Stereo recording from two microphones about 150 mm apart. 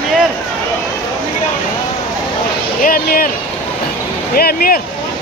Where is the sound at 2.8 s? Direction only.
70° left (ahead or behind).